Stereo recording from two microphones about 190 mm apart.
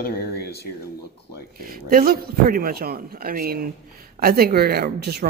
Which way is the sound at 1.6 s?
50° right (ahead or behind).